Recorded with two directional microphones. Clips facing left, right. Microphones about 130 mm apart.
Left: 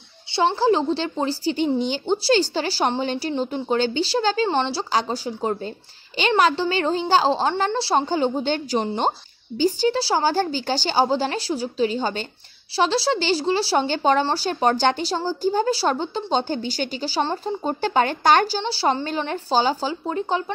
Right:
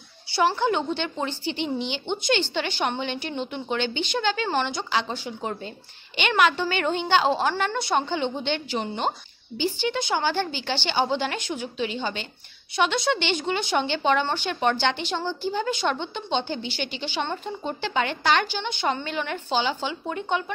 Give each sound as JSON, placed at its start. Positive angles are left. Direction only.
{"t": 0.3, "sound": "a woman's voice", "side_deg": 25}